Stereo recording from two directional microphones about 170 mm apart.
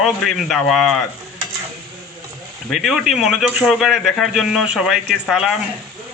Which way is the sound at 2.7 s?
5° right (ahead or behind).